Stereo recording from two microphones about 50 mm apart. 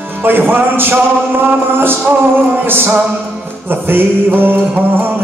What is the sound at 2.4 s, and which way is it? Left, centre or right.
Music, right.